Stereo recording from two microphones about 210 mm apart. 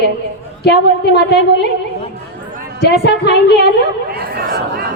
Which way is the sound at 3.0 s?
50° left (ahead or behind).